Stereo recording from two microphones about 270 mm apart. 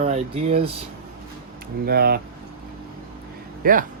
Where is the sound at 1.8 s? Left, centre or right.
Right.